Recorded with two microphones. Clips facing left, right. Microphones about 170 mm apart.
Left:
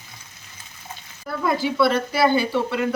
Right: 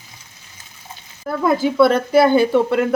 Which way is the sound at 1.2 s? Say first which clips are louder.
Right 5 dB; 50° right (ahead or behind).